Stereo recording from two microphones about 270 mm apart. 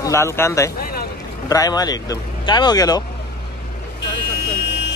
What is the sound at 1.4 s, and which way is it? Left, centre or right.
Speech, centre.